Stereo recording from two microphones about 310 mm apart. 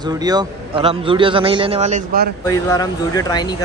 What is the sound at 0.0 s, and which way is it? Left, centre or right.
A man's voice, centre.